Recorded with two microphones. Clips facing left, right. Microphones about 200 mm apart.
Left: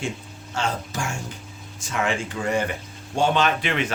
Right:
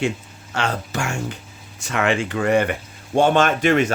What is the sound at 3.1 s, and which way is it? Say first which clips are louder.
Speech: right 5 dB; 55° right (ahead or behind).